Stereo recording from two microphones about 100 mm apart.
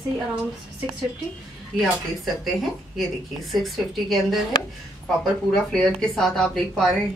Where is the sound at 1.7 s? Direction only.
Centre (ahead or behind).